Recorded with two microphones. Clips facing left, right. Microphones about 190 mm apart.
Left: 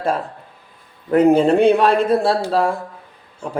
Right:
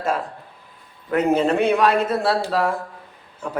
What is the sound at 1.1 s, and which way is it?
Speech, 30° left (ahead or behind).